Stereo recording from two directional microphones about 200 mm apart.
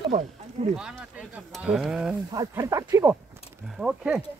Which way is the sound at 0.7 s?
5° right (ahead or behind).